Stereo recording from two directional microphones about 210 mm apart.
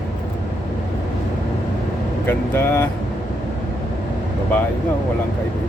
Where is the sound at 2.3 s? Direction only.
10° left (ahead or behind).